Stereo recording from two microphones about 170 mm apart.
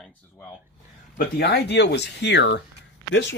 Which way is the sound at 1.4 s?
80° left.